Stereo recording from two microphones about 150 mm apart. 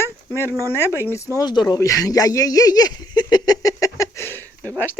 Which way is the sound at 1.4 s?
25° left (ahead or behind).